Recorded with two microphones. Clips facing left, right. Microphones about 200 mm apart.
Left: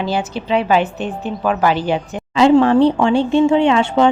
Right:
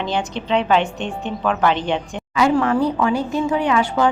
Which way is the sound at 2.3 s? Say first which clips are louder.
Left 6 dB; 25° left (ahead or behind).